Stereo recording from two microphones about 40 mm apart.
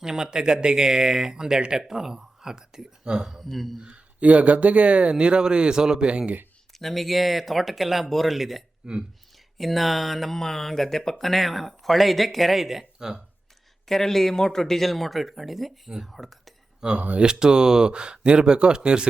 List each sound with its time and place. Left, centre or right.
0.0 s speech: centre
3.2 s speech: centre
4.2 s speech: right; by 6.1 s centre
6.1 s speech: right
6.7 s speech: centre
8.8 s speech: centre
9.6 s speech: centre
13.8 s speech: centre
16.8 s speech: centre